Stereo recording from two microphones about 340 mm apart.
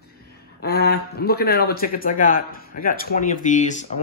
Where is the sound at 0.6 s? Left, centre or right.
Left.